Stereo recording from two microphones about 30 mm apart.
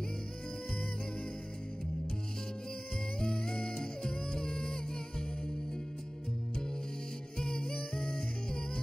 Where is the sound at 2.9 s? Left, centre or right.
Left.